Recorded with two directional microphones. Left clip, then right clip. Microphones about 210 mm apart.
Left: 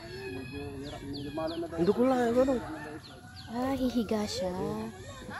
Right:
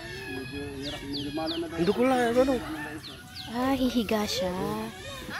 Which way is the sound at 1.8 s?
20° left (ahead or behind).